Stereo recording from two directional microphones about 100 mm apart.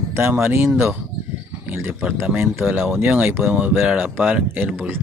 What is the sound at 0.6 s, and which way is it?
Speech, 5° right (ahead or behind).